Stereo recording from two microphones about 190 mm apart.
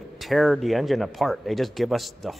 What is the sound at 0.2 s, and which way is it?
Speech, centre (ahead or behind).